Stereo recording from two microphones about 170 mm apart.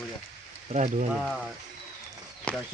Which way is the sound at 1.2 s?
10° left (ahead or behind).